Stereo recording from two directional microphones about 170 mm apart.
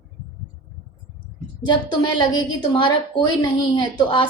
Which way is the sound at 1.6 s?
25° left (ahead or behind).